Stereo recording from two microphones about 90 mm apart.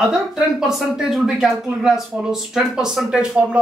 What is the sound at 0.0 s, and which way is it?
Speech, 5° right (ahead or behind).